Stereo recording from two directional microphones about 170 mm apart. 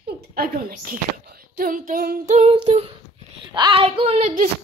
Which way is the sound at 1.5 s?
55° right (ahead or behind).